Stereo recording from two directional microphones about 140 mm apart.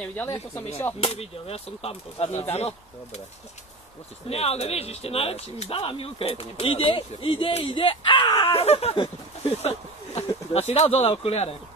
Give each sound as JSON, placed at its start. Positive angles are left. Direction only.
{"t": 0.0, "sound": "speech", "side_deg": 15}
{"t": 1.0, "sound": "speech", "side_deg": 45}
{"t": 4.3, "sound": "speech", "side_deg": 45}
{"t": 8.5, "sound": "speech", "side_deg": 45}